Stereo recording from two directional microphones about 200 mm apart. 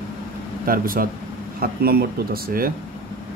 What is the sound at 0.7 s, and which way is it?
Speech, 45° right (ahead or behind).